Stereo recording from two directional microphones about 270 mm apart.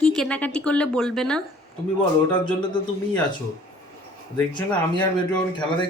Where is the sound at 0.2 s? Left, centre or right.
Centre.